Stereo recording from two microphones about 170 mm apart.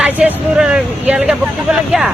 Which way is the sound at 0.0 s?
5° right (ahead or behind).